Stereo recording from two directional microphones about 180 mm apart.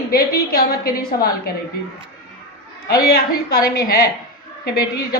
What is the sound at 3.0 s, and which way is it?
Speech, 60° left (ahead or behind).